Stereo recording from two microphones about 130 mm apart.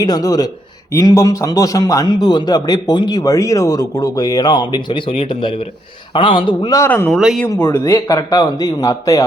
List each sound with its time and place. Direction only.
0.0 s speech: 30° left (ahead or behind)
6.7 s speech: 20° left (ahead or behind)
7.1 s speech: centre (ahead or behind)
7.4 s speech: 25° left (ahead or behind)